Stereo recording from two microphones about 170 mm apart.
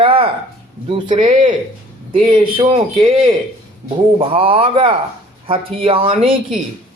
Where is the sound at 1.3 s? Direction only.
50° right (ahead or behind).